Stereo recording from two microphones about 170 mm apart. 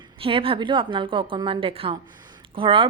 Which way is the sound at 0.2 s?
30° right (ahead or behind).